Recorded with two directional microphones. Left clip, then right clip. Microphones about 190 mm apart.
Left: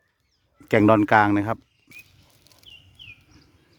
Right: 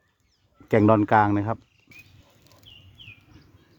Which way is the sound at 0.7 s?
15° left (ahead or behind).